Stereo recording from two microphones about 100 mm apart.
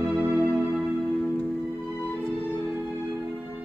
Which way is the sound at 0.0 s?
20° right (ahead or behind).